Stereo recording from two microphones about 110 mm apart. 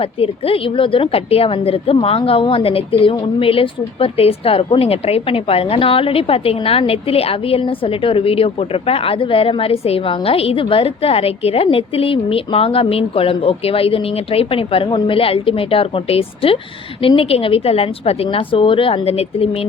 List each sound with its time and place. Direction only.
0.0 s a woman's voice: 60° left (ahead or behind)